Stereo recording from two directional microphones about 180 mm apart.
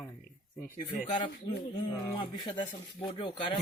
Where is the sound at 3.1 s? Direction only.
30° left (ahead or behind).